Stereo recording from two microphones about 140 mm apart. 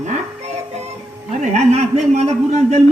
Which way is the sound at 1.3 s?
50° right (ahead or behind).